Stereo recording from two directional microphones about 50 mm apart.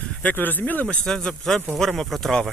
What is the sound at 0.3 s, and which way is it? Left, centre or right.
Speech, left.